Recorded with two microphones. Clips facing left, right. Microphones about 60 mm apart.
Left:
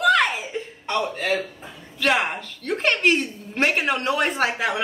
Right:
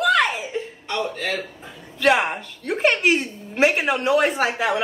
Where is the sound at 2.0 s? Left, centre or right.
Centre.